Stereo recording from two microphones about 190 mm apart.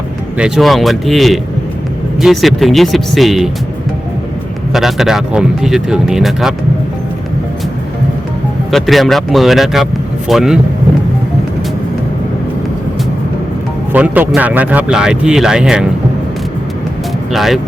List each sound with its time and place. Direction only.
0.3 s speech: 5° right (ahead or behind)
4.7 s speech: centre (ahead or behind)
8.7 s speech: centre (ahead or behind)
13.9 s speech: 10° right (ahead or behind)
17.3 s speech: centre (ahead or behind)